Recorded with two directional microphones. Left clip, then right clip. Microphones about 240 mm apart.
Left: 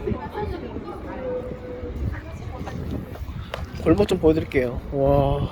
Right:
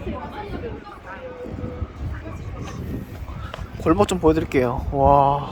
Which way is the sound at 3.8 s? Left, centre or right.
Centre.